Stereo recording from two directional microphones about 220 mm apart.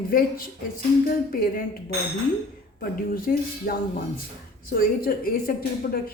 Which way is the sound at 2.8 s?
40° left (ahead or behind).